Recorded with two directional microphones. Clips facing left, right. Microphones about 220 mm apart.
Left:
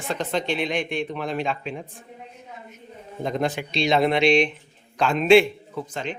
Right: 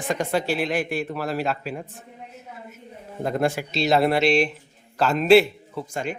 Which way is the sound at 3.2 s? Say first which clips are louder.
Right 2 dB; 5° right (ahead or behind).